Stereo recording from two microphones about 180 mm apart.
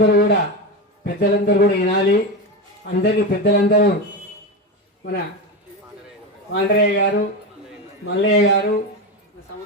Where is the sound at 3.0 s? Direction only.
60° left (ahead or behind).